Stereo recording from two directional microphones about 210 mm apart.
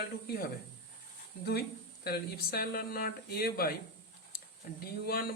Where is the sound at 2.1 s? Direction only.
50° left (ahead or behind).